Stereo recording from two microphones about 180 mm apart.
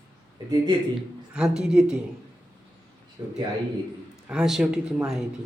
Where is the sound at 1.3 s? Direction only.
5° right (ahead or behind).